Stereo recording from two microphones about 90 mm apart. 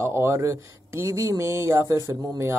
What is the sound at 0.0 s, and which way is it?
Speech, 30° right (ahead or behind).